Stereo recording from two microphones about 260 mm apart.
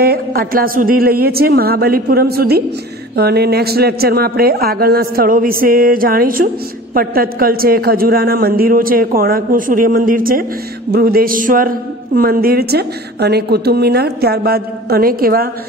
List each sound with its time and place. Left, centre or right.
0.0 s a man's voice: right